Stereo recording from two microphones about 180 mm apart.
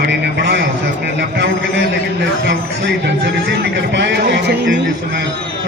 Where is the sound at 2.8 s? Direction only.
70° right (ahead or behind).